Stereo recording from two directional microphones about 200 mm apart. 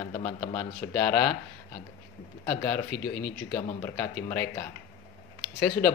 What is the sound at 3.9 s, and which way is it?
Speech, 10° left (ahead or behind).